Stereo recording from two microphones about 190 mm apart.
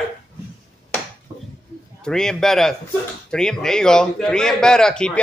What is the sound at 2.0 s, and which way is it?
A man's voice, 5° left (ahead or behind).